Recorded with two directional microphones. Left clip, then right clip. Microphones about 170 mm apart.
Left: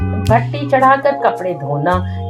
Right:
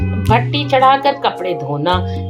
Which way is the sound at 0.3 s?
35° right (ahead or behind).